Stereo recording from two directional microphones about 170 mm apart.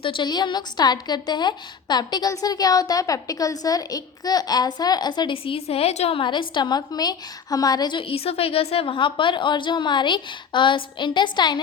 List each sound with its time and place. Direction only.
0.0 s a woman's voice: 30° left (ahead or behind)